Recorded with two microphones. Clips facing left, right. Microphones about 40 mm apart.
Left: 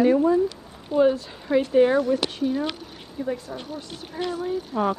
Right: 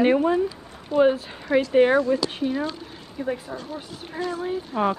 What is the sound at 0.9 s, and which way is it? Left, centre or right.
Speech, centre.